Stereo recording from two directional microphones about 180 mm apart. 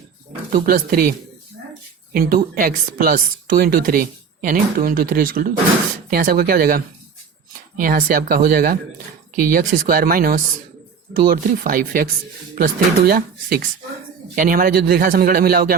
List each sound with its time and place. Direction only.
0.5 s a woman's voice: 50° right (ahead or behind)
2.1 s a woman's voice: 50° right (ahead or behind)